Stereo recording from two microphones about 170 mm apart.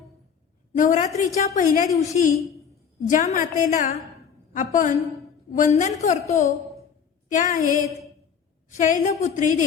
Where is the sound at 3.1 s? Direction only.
45° left (ahead or behind).